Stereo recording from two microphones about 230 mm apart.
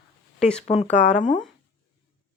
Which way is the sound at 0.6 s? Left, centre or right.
Left.